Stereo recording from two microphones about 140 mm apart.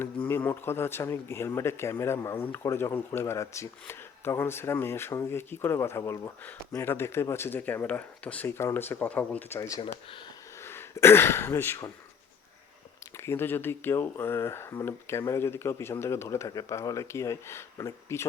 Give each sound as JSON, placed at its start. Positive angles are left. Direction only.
{"t": 0.0, "sound": "a man's voice", "side_deg": 15}
{"t": 9.6, "sound": "speech", "side_deg": 25}
{"t": 13.1, "sound": "speech", "side_deg": 20}